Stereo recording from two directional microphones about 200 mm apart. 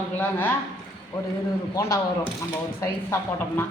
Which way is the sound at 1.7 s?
15° left (ahead or behind).